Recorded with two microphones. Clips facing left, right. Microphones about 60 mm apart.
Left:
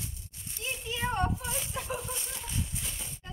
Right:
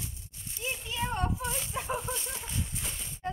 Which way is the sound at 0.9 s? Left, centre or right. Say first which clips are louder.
Left 2 dB; centre.